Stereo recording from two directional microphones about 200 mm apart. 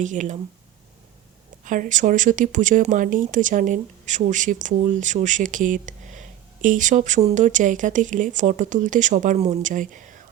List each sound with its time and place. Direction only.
0.0 s speech: 40° right (ahead or behind)
1.6 s speech: 40° right (ahead or behind)